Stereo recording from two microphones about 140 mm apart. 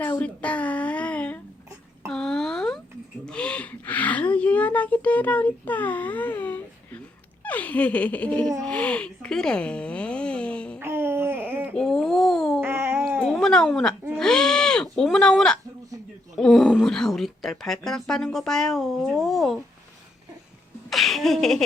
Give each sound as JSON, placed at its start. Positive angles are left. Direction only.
{"t": 0.0, "sound": "a sound", "side_deg": 10}
{"t": 7.4, "sound": "laughter", "side_deg": 10}
{"t": 8.6, "sound": "speech", "side_deg": 10}
{"t": 10.8, "sound": "babbling", "side_deg": -15}
{"t": 11.7, "sound": "a sound", "side_deg": 5}
{"t": 12.6, "sound": "a sound", "side_deg": -15}
{"t": 13.2, "sound": "cat", "side_deg": 5}
{"t": 14.2, "sound": "bleat", "side_deg": 5}
{"t": 16.4, "sound": "speech", "side_deg": 0}
{"t": 20.9, "sound": "speech", "side_deg": 0}